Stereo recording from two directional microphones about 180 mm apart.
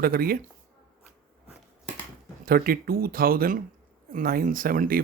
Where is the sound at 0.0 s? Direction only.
55° right (ahead or behind).